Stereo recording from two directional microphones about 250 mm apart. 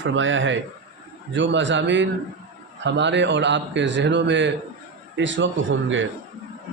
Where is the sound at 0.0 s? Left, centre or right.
Right.